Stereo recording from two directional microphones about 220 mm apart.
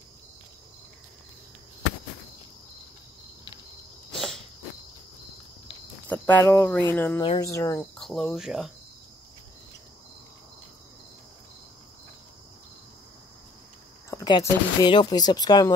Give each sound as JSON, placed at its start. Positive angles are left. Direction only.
{"t": 4.1, "sound": "cricket", "side_deg": 0}
{"t": 6.0, "sound": "speech", "side_deg": 10}
{"t": 8.0, "sound": "speech", "side_deg": 0}
{"t": 14.1, "sound": "speech", "side_deg": 15}